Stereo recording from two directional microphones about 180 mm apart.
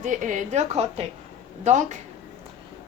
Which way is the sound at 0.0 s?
45° right (ahead or behind).